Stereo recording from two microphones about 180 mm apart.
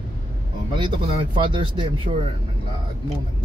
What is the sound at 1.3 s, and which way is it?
Speech, 30° right (ahead or behind).